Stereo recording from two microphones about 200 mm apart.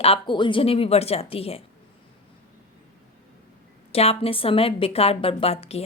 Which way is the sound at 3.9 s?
30° left (ahead or behind).